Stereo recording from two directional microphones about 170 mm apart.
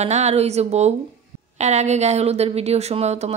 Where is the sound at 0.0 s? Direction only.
40° right (ahead or behind).